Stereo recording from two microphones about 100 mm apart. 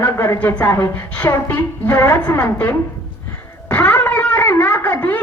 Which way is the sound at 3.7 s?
15° left (ahead or behind).